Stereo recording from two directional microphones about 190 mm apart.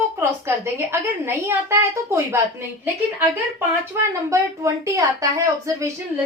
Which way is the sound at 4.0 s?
15° right (ahead or behind).